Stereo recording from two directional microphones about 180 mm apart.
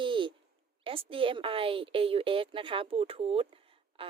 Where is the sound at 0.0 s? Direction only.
25° right (ahead or behind).